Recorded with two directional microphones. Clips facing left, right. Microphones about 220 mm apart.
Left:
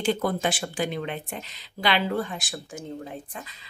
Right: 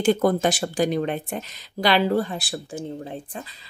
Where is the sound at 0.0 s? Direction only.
45° right (ahead or behind).